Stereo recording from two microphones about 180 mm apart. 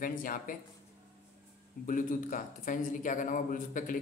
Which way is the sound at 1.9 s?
50° left (ahead or behind).